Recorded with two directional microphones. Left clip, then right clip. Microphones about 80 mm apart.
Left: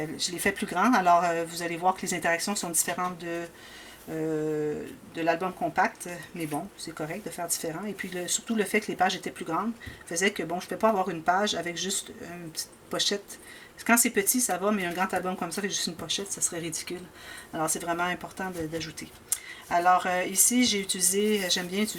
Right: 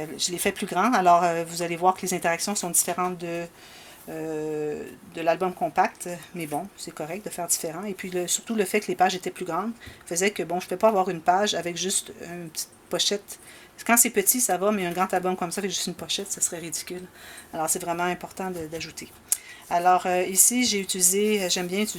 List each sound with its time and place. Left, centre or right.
0.0 s speech: right
5.1 s speech: right